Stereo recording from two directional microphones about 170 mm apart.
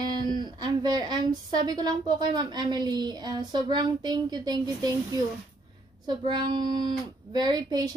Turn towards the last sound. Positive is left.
turn(degrees=-25)  # may be behind; listen again after turning